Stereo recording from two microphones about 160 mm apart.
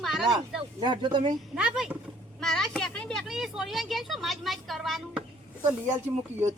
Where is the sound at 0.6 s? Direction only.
30° right (ahead or behind).